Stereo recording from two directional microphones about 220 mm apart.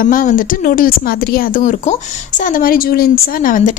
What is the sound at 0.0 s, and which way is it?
Speech, 40° left (ahead or behind).